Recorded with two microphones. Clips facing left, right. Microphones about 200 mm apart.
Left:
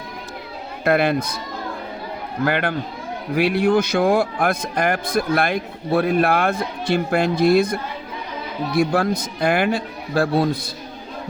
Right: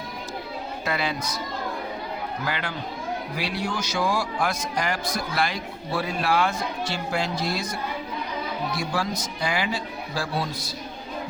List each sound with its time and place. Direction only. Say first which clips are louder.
0.9 s a man's voice: left 11 dB; 55° left (ahead or behind)
2.4 s a man's voice: left 14 dB; 60° left (ahead or behind)